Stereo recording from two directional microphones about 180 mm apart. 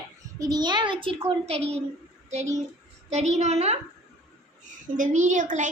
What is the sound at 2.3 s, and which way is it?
A woman's voice, 40° right (ahead or behind).